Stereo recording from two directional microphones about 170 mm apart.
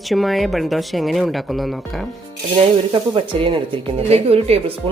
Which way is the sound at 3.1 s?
30° right (ahead or behind).